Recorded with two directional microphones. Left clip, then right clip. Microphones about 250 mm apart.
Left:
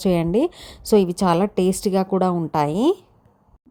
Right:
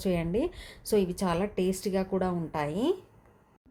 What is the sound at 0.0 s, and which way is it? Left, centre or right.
A woman's voice, left.